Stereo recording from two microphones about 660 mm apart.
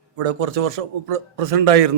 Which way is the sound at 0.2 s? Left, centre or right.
Right.